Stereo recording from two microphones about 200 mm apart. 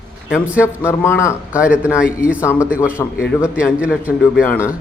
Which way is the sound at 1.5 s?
5° right (ahead or behind).